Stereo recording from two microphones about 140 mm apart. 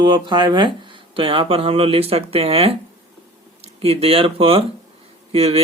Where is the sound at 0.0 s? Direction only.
35° right (ahead or behind).